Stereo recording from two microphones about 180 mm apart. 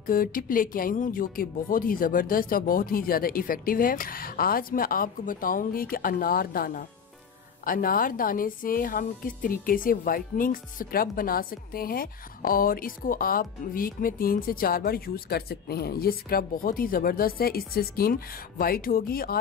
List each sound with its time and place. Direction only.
0.0 s a woman's voice: 50° left (ahead or behind)